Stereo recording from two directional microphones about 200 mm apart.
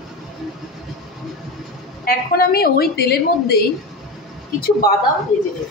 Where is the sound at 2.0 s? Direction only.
50° left (ahead or behind).